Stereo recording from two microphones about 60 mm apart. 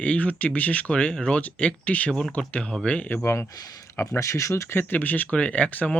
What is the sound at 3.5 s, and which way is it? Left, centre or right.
Speech, left.